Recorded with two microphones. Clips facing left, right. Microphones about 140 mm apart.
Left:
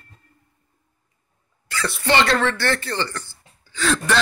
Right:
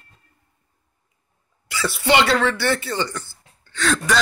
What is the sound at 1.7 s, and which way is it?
Speech, 10° right (ahead or behind).